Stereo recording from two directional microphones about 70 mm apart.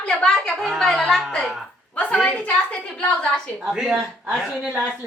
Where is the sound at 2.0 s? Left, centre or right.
Centre.